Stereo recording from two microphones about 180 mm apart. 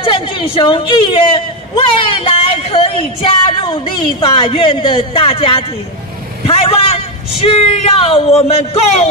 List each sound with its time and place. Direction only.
0.0 s a woman's voice: 30° left (ahead or behind)
6.4 s vehicle: 30° left (ahead or behind)
7.4 s speech: 35° left (ahead or behind)